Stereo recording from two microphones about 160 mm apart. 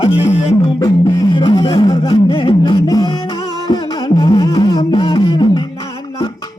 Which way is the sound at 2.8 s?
25° left (ahead or behind).